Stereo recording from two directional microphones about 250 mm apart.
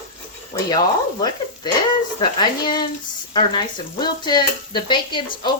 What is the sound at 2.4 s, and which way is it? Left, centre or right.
Speech, centre.